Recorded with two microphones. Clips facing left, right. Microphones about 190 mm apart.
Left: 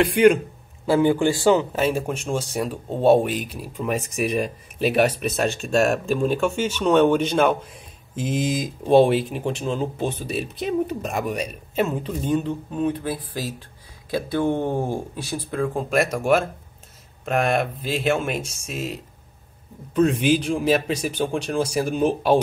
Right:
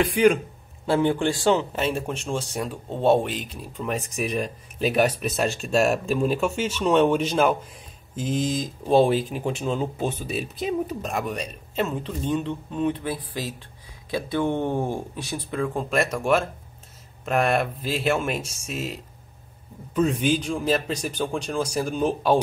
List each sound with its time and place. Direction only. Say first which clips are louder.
0.0 s speech: left 3 dB; centre (ahead or behind)